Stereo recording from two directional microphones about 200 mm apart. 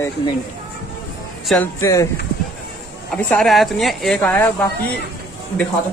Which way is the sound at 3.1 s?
5° left (ahead or behind).